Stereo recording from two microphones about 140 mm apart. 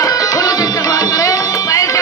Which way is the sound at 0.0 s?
25° left (ahead or behind).